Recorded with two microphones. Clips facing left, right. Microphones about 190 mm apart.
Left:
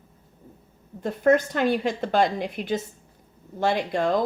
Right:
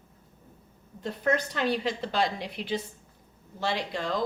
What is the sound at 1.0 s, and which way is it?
Speech, 50° left (ahead or behind).